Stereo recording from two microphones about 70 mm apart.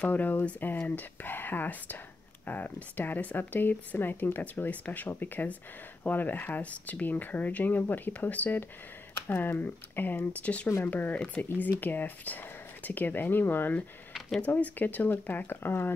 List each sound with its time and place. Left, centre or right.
0.0 s speech: left